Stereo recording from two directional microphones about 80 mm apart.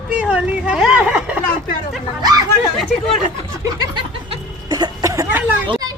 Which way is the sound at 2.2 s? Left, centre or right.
Right.